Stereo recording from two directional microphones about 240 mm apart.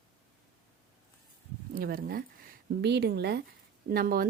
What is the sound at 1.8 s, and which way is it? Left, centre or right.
A woman's voice, right.